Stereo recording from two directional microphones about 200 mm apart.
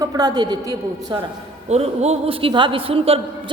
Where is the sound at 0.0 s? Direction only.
20° right (ahead or behind).